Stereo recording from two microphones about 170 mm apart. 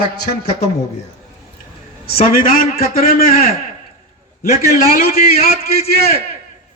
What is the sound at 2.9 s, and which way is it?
Speech, 60° left (ahead or behind).